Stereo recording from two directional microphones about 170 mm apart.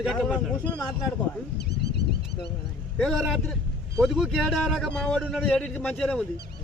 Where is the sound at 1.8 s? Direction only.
75° left (ahead or behind).